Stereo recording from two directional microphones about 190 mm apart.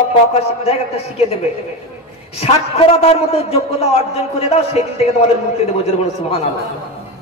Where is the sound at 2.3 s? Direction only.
35° left (ahead or behind).